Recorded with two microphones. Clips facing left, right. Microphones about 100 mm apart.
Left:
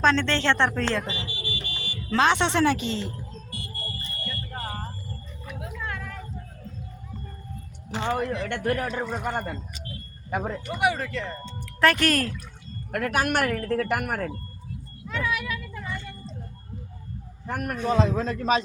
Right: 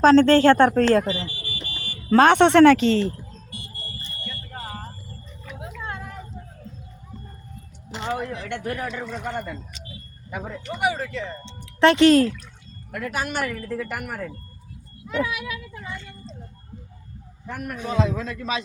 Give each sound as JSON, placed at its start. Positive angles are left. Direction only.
{"t": 0.0, "sound": "speech", "side_deg": -40}
{"t": 3.5, "sound": "a sound", "side_deg": -20}
{"t": 4.6, "sound": "vehicle", "side_deg": -5}
{"t": 5.5, "sound": "vehicle", "side_deg": -25}
{"t": 8.4, "sound": "speech", "side_deg": 60}
{"t": 8.9, "sound": "a man's voice", "side_deg": 40}
{"t": 9.8, "sound": "a sound", "side_deg": 55}
{"t": 10.7, "sound": "speech", "side_deg": 0}
{"t": 11.4, "sound": "speech", "side_deg": -25}
{"t": 12.9, "sound": "speech", "side_deg": 60}
{"t": 15.0, "sound": "speech", "side_deg": -15}
{"t": 17.4, "sound": "a man's voice", "side_deg": 55}
{"t": 17.8, "sound": "speech", "side_deg": 40}